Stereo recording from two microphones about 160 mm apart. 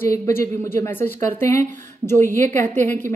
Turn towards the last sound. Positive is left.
turn(degrees=15)  # may be behind; listen again after turning